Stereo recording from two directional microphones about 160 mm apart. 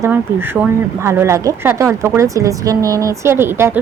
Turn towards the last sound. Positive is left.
turn(degrees=-15)  # may be behind; listen again after turning